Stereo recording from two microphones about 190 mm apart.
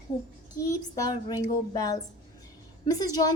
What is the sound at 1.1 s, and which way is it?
A child's voice, 20° left (ahead or behind).